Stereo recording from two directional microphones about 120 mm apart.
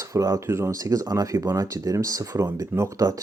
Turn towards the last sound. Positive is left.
turn(degrees=-25)  # may be behind; listen again after turning